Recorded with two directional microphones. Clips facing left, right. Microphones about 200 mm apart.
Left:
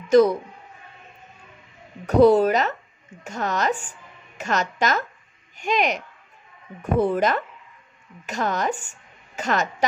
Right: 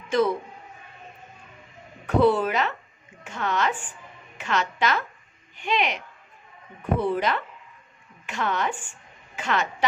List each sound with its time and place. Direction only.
0.1 s speech: 40° left (ahead or behind)
2.0 s a woman's voice: 40° left (ahead or behind)